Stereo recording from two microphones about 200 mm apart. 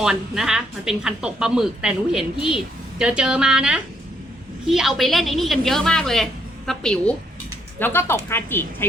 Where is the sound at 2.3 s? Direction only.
25° left (ahead or behind).